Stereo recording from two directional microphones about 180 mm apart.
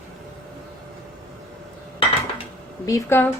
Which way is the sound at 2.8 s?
15° left (ahead or behind).